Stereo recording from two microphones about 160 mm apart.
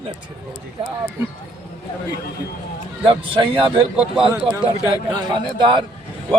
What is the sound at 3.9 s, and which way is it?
Speech, 5° right (ahead or behind).